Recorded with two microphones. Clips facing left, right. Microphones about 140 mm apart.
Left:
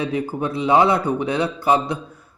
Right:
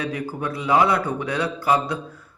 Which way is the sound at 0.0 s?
25° left (ahead or behind).